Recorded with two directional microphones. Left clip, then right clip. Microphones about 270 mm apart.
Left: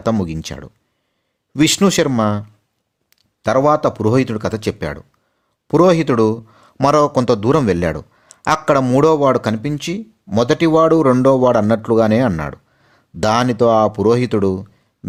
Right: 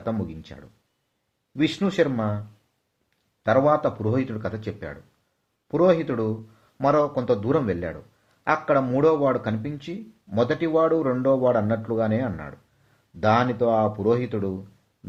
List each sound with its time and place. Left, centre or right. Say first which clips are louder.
0.0 s a man's voice: left 11 dB; left